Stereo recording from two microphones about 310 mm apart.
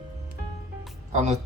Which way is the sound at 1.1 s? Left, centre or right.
Right.